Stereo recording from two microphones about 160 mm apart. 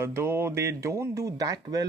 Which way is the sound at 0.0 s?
15° right (ahead or behind).